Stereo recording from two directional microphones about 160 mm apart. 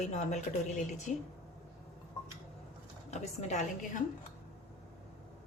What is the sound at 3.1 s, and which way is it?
Speech, 45° left (ahead or behind).